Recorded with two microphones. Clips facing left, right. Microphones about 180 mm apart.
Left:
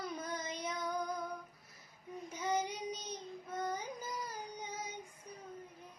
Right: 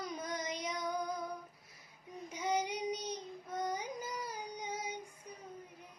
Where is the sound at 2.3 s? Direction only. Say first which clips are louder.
Right 1 dB; 10° right (ahead or behind).